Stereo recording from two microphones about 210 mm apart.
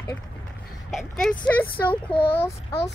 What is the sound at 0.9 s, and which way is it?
Speech, centre (ahead or behind).